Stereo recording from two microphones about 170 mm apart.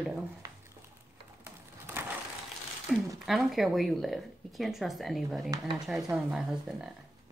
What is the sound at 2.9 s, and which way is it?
A woman's voice, centre (ahead or behind).